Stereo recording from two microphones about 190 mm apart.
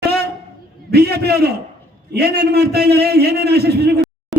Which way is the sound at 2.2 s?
60° right (ahead or behind).